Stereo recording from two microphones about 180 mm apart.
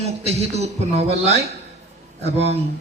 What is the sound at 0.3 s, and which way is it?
Speech, 35° right (ahead or behind).